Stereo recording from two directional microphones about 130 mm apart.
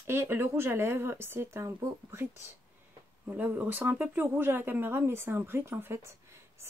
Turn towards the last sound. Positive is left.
turn(degrees=-20)  # may be behind; listen again after turning